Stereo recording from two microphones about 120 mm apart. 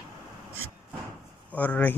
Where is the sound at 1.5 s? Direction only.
10° left (ahead or behind).